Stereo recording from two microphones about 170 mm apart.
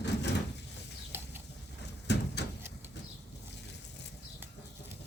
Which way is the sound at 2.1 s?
90° left.